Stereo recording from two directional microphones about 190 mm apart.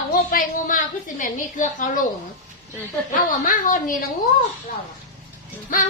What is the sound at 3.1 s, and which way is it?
Speech, 45° left (ahead or behind).